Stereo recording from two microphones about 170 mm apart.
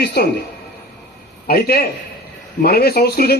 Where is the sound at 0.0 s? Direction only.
70° left (ahead or behind).